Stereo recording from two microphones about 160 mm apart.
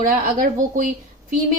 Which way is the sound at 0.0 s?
55° right (ahead or behind).